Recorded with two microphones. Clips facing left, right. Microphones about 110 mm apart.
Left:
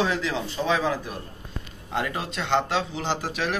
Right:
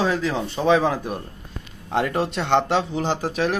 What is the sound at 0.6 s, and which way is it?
Speech, 60° right (ahead or behind).